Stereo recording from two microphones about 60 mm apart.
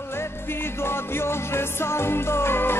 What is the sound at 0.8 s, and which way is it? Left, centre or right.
Music, left.